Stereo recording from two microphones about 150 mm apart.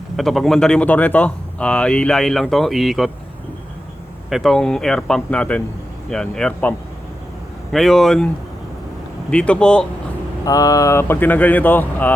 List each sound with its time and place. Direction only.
0.2 s speech: centre (ahead or behind)
4.3 s speech: centre (ahead or behind)
9.3 s speech: 5° left (ahead or behind)
10.4 s speech: 25° left (ahead or behind)